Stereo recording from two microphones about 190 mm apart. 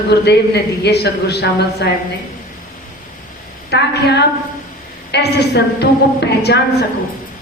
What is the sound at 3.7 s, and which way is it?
Speech, 60° left (ahead or behind).